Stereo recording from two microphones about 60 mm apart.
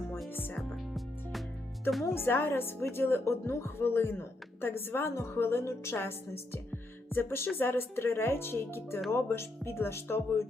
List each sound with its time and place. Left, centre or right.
0.3 s speech: left
0.9 s music: centre
2.1 s a woman's voice: left